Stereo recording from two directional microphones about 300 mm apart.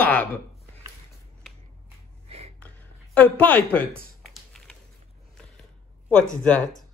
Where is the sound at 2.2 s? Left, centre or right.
Right.